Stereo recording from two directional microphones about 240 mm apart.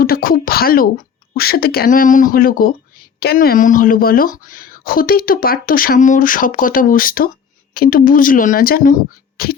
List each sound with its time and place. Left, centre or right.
0.0 s speech: left